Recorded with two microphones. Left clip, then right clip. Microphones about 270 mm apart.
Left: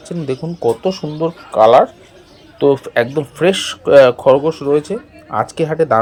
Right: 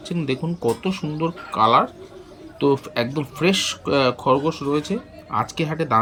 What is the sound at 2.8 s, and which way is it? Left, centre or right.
Speech, centre.